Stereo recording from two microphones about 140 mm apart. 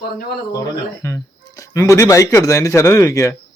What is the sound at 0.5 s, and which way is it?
Speech, 20° left (ahead or behind).